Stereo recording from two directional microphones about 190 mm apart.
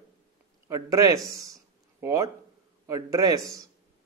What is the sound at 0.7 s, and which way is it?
A man's voice, 15° right (ahead or behind).